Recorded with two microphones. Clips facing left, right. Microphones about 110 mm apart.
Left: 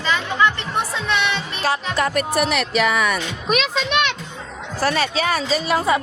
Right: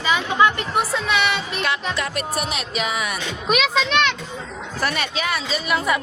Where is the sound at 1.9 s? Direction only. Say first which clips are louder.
Left 5 dB; 50° left (ahead or behind).